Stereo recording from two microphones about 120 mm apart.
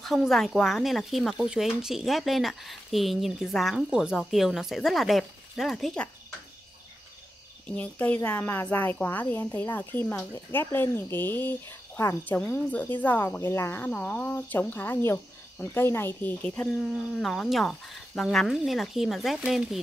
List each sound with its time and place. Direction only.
0.0 s speech: centre (ahead or behind)
7.6 s speech: 10° left (ahead or behind); by 19.8 s 5° right (ahead or behind)